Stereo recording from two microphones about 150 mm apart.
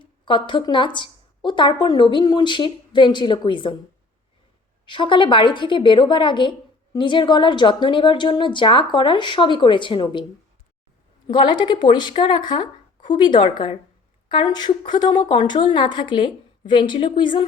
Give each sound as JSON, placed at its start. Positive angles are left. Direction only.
{"t": 0.0, "sound": "a woman's voice", "side_deg": 30}
{"t": 4.9, "sound": "a woman's voice", "side_deg": 35}
{"t": 11.3, "sound": "a woman's voice", "side_deg": 30}